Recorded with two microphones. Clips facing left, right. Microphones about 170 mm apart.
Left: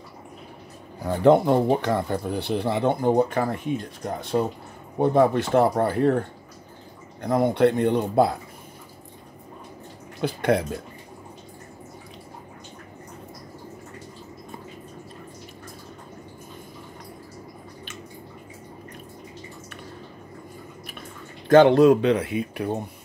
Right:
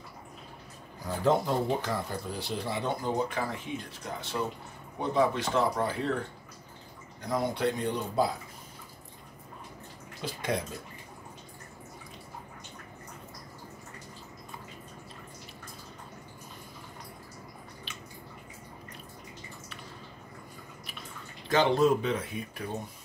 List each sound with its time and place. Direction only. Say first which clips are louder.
1.0 s speech: left 9 dB; 65° left (ahead or behind)
10.2 s speech: left 10 dB; 65° left (ahead or behind)
21.5 s speech: left 10 dB; 60° left (ahead or behind)